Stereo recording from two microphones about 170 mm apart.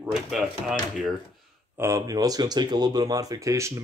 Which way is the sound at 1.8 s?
20° right (ahead or behind).